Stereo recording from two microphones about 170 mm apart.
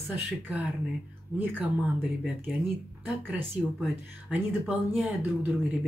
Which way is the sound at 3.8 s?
10° right (ahead or behind).